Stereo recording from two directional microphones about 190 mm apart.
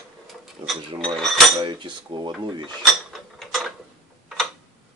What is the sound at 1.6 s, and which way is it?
Cutlery, 25° right (ahead or behind).